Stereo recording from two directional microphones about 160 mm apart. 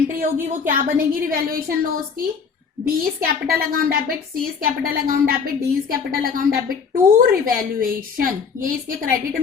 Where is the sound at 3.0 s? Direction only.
65° right (ahead or behind).